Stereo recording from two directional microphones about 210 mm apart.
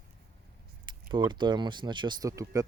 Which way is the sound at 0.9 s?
20° right (ahead or behind).